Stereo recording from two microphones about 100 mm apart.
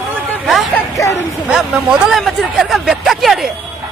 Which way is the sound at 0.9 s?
35° left (ahead or behind).